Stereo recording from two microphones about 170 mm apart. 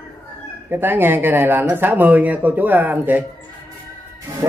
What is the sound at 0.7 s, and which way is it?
Speech, 10° right (ahead or behind).